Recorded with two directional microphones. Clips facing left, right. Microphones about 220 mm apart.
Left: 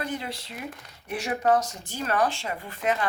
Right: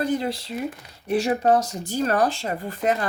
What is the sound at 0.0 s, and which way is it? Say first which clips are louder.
Speech: right 8 dB; 35° right (ahead or behind).